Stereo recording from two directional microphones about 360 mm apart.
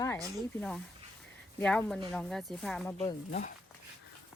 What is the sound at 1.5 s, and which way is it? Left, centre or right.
A woman's voice, centre.